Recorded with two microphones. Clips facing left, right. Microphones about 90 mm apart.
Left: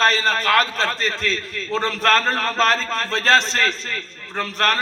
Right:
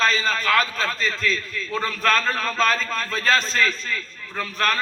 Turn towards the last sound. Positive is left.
turn(degrees=65)  # may be behind; listen again after turning